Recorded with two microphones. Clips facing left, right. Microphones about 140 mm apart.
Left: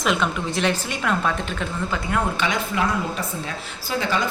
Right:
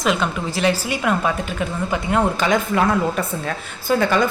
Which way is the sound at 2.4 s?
45° right (ahead or behind).